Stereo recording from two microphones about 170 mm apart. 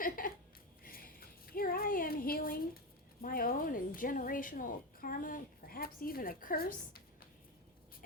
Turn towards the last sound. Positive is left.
turn(degrees=60)  # may be behind; listen again after turning